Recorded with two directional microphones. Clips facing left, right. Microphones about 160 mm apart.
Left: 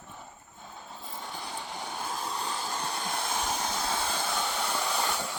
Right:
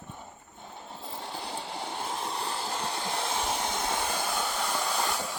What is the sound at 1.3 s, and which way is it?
Vehicle, 30° right (ahead or behind).